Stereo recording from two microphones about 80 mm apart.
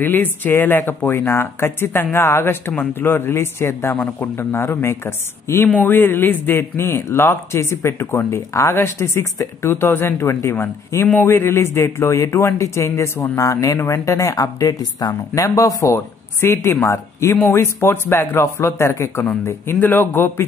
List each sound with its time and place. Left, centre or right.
0.0 s a man's voice: left
5.7 s a man's voice: left
15.3 s speech: left
16.3 s a man's voice: left